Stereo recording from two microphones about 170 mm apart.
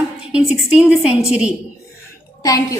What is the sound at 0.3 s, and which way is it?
A woman's voice, 5° right (ahead or behind).